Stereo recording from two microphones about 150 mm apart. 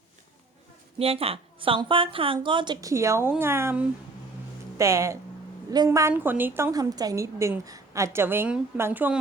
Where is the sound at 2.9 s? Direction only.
20° right (ahead or behind).